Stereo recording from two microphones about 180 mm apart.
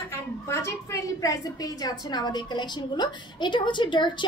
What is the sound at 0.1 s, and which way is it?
A woman's voice, 15° left (ahead or behind).